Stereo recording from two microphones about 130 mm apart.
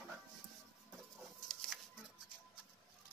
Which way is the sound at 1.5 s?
Centre (ahead or behind).